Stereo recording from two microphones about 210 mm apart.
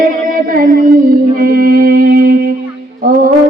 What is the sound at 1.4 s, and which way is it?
Music, 45° right (ahead or behind).